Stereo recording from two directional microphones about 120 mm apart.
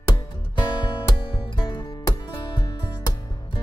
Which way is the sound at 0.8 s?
40° left (ahead or behind).